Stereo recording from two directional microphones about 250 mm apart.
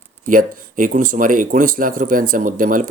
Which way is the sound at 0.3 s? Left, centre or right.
Right.